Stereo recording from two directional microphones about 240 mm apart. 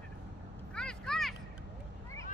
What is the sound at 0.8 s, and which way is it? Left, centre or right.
Vehicle, centre.